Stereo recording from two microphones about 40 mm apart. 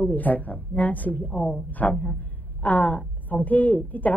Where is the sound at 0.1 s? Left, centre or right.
Left.